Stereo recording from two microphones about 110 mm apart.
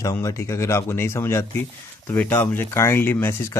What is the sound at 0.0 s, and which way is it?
Speech, 30° left (ahead or behind).